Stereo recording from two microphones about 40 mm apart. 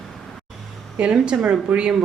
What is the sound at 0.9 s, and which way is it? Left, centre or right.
Speech, right.